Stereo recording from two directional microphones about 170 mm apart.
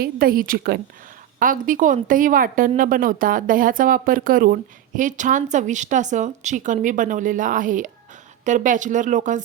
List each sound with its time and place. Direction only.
0.0 s a woman's voice: 60° right (ahead or behind)